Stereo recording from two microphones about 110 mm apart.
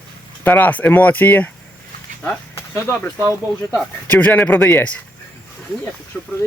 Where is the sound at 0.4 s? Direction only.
15° left (ahead or behind).